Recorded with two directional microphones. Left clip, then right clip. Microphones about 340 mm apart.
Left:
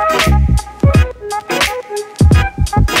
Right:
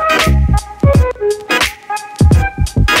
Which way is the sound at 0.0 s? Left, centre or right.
Centre.